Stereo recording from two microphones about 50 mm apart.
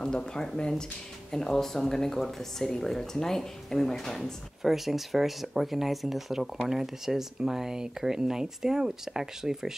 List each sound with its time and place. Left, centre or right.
0.0 s speech: centre